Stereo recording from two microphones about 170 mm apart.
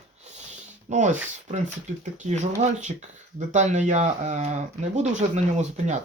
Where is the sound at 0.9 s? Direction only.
45° right (ahead or behind).